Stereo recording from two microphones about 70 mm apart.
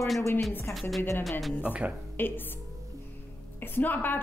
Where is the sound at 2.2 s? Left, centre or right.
Left.